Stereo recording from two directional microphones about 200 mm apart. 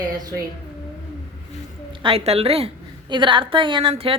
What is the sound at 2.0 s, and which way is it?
A woman's voice, 30° right (ahead or behind).